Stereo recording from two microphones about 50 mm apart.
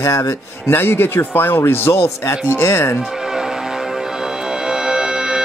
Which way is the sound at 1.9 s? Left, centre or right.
Left.